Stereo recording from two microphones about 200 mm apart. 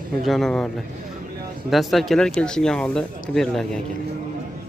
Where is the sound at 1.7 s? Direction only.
Centre (ahead or behind).